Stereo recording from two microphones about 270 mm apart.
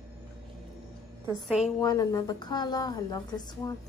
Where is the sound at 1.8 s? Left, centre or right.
Centre.